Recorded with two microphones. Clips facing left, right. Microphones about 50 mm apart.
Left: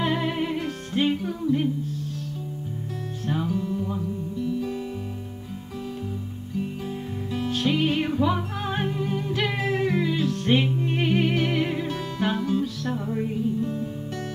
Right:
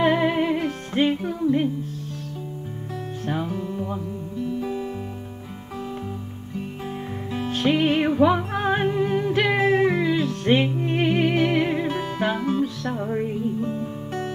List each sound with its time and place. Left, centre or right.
0.0 s music: right
3.3 s music: centre
7.4 s music: right; by 10.7 s centre
10.7 s music: right